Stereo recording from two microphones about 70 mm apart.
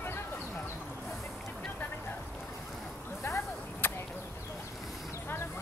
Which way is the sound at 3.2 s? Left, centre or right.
Left.